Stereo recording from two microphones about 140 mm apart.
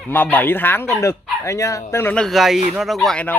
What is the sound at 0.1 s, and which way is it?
Speech, 15° left (ahead or behind).